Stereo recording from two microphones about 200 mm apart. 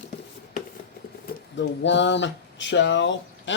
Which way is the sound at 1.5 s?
60° left (ahead or behind).